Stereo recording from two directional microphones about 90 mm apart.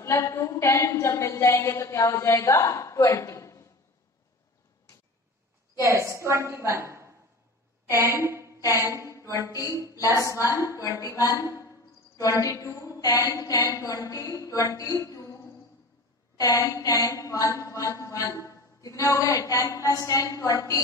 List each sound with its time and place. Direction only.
0.0 s a woman's voice: 35° left (ahead or behind)
5.8 s a woman's voice: 35° right (ahead or behind)
9.1 s a woman's voice: 35° left (ahead or behind)